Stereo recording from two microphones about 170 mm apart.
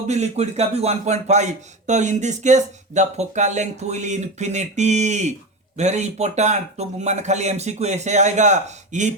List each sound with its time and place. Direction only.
0.1 s speech: 40° right (ahead or behind)